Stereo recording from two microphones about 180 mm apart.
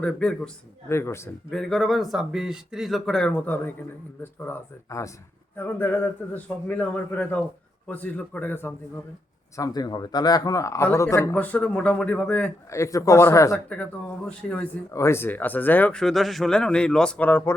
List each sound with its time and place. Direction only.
0.0 s speech: 5° left (ahead or behind)
1.5 s speech: centre (ahead or behind)
9.6 s speech: 20° left (ahead or behind)